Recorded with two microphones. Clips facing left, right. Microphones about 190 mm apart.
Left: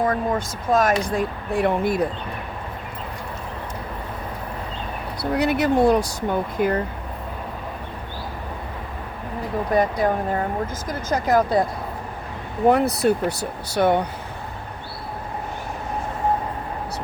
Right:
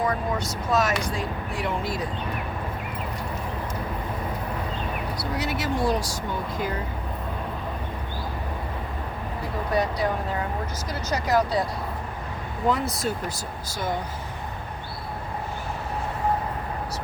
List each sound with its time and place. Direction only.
0.1 s speech: 50° left (ahead or behind)
5.3 s speech: 60° left (ahead or behind)
9.7 s speech: 50° left (ahead or behind)
12.6 s speech: 65° left (ahead or behind)